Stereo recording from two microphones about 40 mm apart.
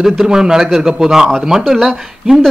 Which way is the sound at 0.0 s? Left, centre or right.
Centre.